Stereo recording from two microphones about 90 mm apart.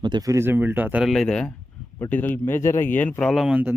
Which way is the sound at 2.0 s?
20° left (ahead or behind).